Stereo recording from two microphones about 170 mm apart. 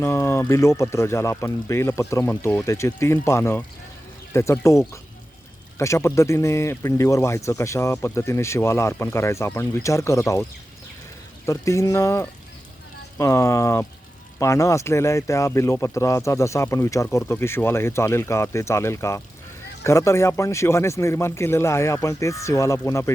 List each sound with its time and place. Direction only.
0.0 s speech: 15° left (ahead or behind)
11.4 s speech: 15° left (ahead or behind)